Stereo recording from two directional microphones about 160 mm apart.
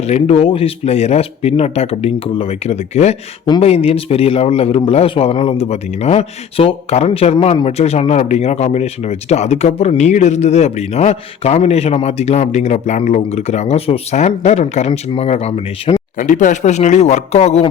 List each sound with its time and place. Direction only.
0.0 s a man's voice: 40° left (ahead or behind)